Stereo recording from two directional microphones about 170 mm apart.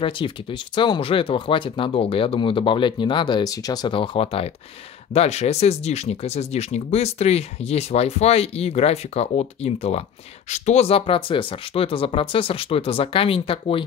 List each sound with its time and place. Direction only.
0.0 s speech: 30° left (ahead or behind)